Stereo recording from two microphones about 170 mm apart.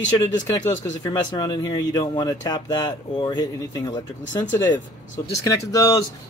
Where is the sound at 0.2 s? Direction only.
20° left (ahead or behind).